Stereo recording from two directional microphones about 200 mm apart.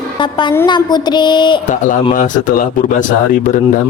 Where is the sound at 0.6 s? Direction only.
20° left (ahead or behind).